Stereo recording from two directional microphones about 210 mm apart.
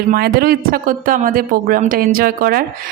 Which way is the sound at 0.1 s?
50° right (ahead or behind).